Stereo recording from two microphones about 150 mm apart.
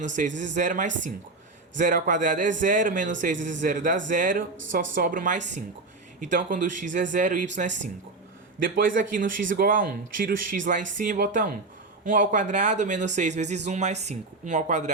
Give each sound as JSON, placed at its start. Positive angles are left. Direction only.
{"t": 0.2, "sound": "a man's voice", "side_deg": -55}
{"t": 8.5, "sound": "a man's voice", "side_deg": -70}